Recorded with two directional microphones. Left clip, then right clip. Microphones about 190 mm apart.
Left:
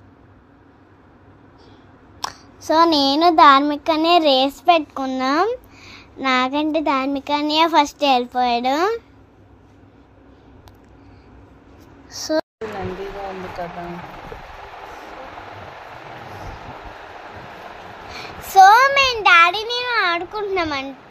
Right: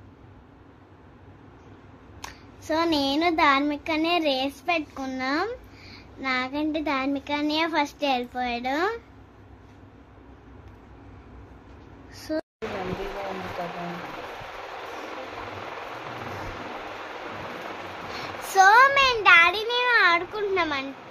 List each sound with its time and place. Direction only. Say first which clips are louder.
2.2 s a child's voice: left 9 dB; 30° left (ahead or behind)
12.1 s speech: left 9 dB; 20° left (ahead or behind)
18.1 s a sound: left 8 dB; 20° left (ahead or behind)